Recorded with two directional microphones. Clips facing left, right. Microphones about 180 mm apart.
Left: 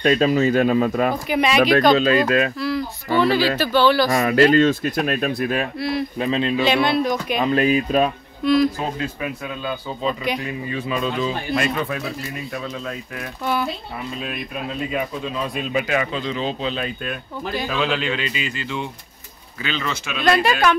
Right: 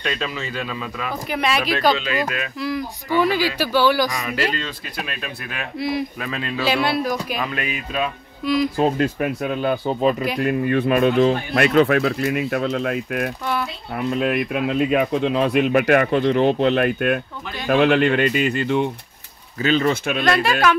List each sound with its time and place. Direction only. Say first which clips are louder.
0.0 s speech: left 10 dB; 45° left (ahead or behind)
1.3 s speech: left 4 dB; centre (ahead or behind)
2.2 s speech: left 8 dB; 35° left (ahead or behind)
2.6 s speech: left 1 dB; 15° right (ahead or behind)
4.1 s speech: left 9 dB; 55° left (ahead or behind); by 5.7 s 35° left (ahead or behind)
5.8 s speech: even; 15° right (ahead or behind)
6.1 s speech: left 7 dB; 25° left (ahead or behind)
6.6 s speech: right 1 dB; 5° right (ahead or behind)
7.3 s speech: left 8 dB; 30° left (ahead or behind)
8.7 s speech: right 7 dB; 55° right (ahead or behind)
19.6 s speech: right 8 dB; 45° right (ahead or behind)
20.2 s speech: left 2 dB; centre (ahead or behind)